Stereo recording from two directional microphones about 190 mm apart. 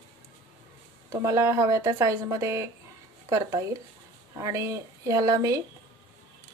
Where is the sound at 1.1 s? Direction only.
15° right (ahead or behind).